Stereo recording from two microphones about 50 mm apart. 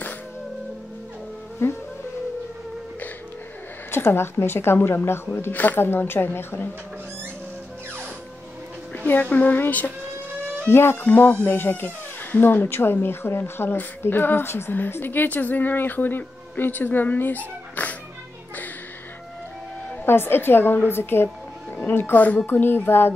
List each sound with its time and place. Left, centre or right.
1.6 s music: left
3.9 s speech: left
5.5 s a woman's voice: left
5.8 s speech: left
8.9 s a woman's voice: left
10.7 s speech: left
11.0 s a woman's voice: left
20.1 s speech: left
22.1 s a woman's voice: left
22.5 s speech: left